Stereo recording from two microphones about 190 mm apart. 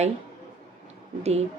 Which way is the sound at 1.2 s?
35° right (ahead or behind).